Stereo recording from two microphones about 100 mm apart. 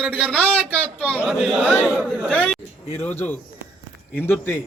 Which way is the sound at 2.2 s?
15° left (ahead or behind).